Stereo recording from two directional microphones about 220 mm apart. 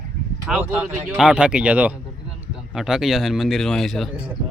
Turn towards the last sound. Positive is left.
turn(degrees=0)  # may be behind; listen again after turning